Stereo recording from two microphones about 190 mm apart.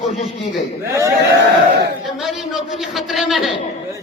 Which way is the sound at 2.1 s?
Centre (ahead or behind).